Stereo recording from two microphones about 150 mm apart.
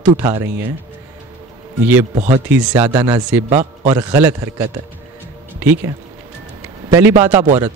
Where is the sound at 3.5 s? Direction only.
50° right (ahead or behind).